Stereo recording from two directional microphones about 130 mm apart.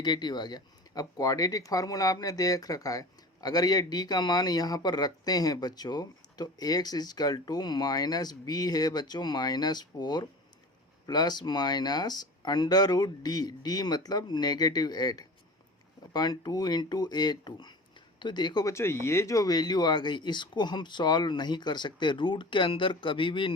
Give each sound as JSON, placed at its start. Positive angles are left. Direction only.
{"t": 0.0, "sound": "speech", "side_deg": 35}